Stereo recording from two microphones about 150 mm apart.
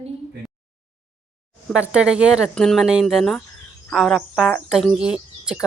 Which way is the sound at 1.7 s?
5° right (ahead or behind).